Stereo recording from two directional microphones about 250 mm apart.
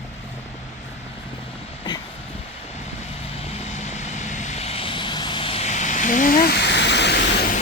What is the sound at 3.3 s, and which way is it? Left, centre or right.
Vehicle, left.